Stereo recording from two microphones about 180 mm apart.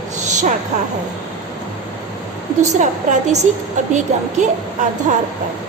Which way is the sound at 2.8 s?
40° right (ahead or behind).